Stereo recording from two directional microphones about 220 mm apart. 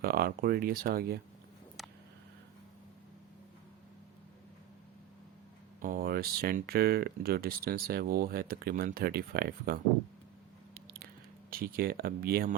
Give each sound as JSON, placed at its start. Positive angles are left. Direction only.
{"t": 0.0, "sound": "speech", "side_deg": -45}
{"t": 5.8, "sound": "speech", "side_deg": -40}
{"t": 10.8, "sound": "biting", "side_deg": -40}
{"t": 11.5, "sound": "speech", "side_deg": -40}